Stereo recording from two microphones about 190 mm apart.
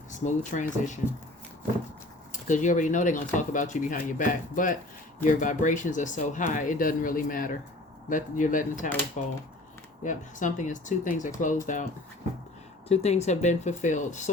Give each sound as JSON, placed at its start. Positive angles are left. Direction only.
{"t": 0.3, "sound": "speech", "side_deg": 40}
{"t": 2.3, "sound": "speech", "side_deg": 40}
{"t": 10.0, "sound": "speech", "side_deg": 40}
{"t": 12.9, "sound": "speech", "side_deg": 35}